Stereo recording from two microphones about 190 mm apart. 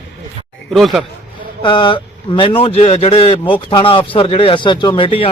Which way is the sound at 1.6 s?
25° left (ahead or behind).